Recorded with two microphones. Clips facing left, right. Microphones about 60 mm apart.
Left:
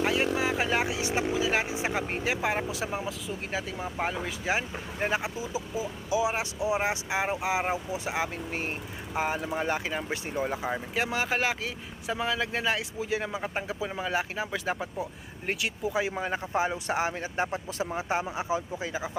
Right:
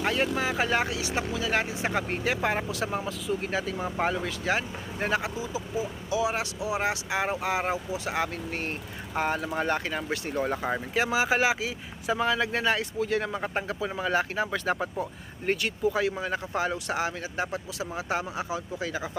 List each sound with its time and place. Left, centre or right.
0.0 s vehicle: centre
0.3 s speech: centre
0.9 s speech: centre
4.1 s speech: centre
16.0 s speech: left